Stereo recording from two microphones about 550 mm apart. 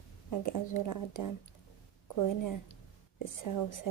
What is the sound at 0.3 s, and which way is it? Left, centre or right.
A woman's voice, left.